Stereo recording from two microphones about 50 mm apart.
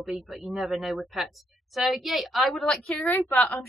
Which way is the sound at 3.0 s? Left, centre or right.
Left.